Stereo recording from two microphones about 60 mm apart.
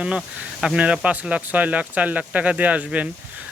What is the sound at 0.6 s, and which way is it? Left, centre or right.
Speech, centre.